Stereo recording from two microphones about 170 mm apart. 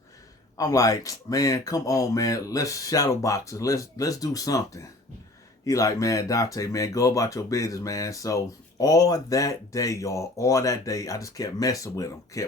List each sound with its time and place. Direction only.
0.5 s speech: 20° left (ahead or behind)